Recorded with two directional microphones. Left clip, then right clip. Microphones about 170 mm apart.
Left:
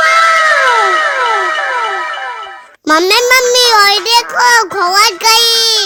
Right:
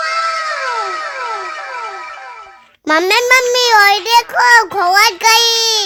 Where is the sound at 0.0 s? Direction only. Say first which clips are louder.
Left 9 dB; 45° left (ahead or behind).